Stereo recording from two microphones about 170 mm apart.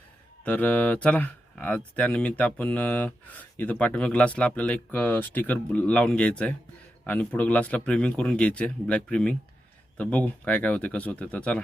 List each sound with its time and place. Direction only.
0.4 s speech: 10° left (ahead or behind)